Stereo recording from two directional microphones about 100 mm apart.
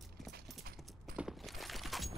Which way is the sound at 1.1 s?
5° right (ahead or behind).